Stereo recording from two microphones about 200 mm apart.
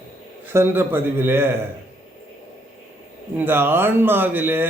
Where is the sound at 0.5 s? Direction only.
10° right (ahead or behind).